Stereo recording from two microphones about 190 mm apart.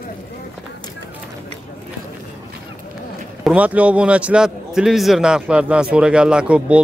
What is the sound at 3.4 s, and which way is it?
A man's voice, 5° right (ahead or behind).